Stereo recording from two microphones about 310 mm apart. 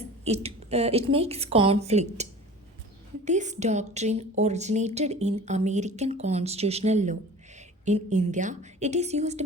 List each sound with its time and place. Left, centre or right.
0.0 s speech: centre
3.2 s speech: right